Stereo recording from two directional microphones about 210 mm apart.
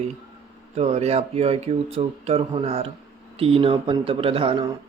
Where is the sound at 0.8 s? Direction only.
30° right (ahead or behind).